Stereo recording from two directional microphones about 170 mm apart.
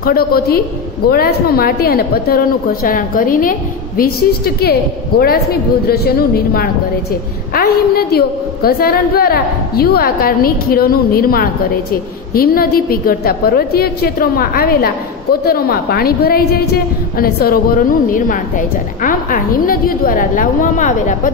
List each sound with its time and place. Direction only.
0.0 s a woman's voice: 60° left (ahead or behind)